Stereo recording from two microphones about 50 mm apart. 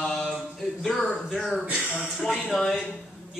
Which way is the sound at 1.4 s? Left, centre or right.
Centre.